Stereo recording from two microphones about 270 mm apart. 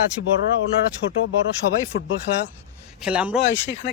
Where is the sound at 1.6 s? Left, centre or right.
Left.